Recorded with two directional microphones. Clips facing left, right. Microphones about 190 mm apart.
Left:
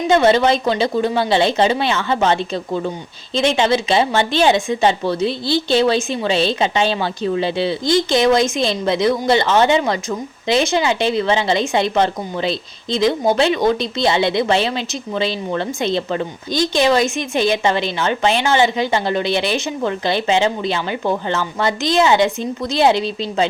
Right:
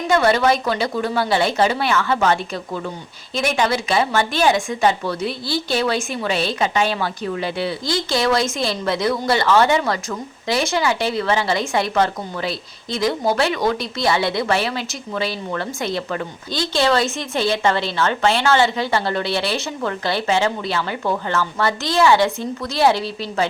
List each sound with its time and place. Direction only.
0.1 s speech: 20° left (ahead or behind)